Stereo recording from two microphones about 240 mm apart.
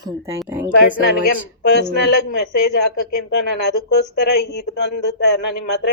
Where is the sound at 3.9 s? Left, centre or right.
Left.